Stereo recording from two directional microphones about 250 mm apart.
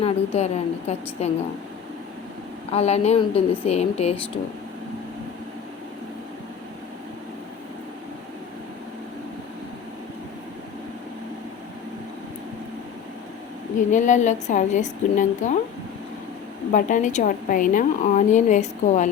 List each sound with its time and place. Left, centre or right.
0.0 s a woman's voice: left
2.7 s a woman's voice: left
13.9 s a woman's voice: left
16.7 s a woman's voice: left